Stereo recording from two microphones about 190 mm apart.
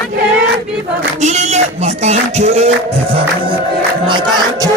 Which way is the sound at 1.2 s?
35° right (ahead or behind).